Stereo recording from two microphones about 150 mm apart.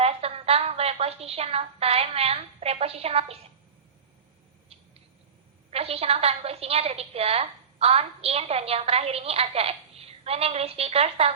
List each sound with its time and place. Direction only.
0.0 s a woman's voice: 40° right (ahead or behind)
5.7 s a woman's voice: 40° right (ahead or behind)